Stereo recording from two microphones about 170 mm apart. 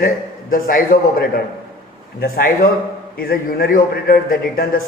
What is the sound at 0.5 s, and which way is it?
A man's voice, 55° left (ahead or behind).